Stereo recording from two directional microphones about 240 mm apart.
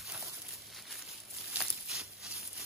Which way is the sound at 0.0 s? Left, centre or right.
Centre.